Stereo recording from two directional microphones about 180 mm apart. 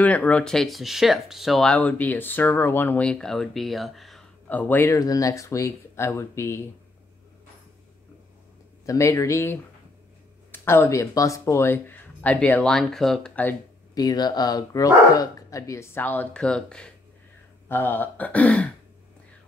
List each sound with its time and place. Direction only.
0.0 s speech: 10° left (ahead or behind)
8.8 s speech: 15° left (ahead or behind)
13.9 s speech: 20° left (ahead or behind)